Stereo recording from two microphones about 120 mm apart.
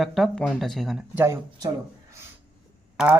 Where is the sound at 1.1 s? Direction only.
20° right (ahead or behind).